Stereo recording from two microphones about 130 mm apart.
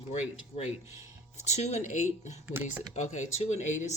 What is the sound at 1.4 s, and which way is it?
Speech, 60° left (ahead or behind).